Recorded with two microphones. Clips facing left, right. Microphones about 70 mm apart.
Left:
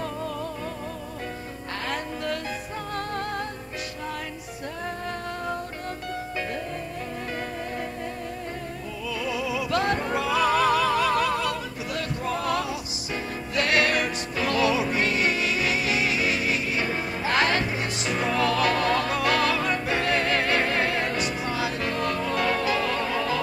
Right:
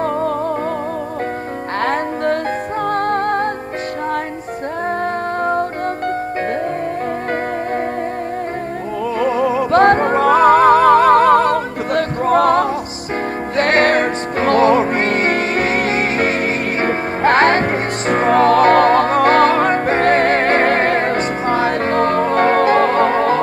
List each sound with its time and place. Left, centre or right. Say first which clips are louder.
1.8 s music: right 13 dB; right
5.4 s music: right 15 dB; right
9.2 s music: right 13 dB; right